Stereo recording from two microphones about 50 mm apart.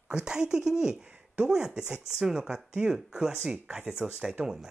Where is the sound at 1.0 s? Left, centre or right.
Right.